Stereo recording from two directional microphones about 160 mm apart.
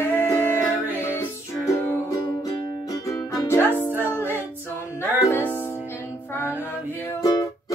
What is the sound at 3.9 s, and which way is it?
Music, 10° right (ahead or behind).